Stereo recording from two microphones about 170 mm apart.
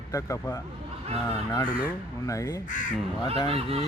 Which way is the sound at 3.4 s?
35° right (ahead or behind).